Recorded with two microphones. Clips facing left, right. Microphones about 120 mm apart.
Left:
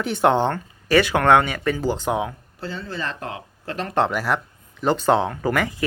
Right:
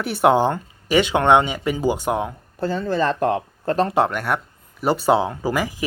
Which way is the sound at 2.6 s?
50° right (ahead or behind).